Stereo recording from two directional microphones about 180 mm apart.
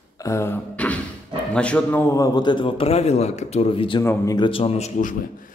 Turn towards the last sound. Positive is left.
turn(degrees=40)  # may be behind; listen again after turning